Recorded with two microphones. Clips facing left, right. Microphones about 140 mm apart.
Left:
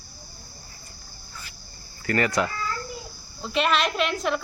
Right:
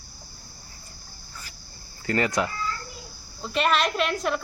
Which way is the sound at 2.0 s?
20° right (ahead or behind).